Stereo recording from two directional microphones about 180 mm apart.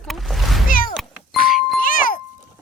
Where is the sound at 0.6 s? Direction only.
50° left (ahead or behind).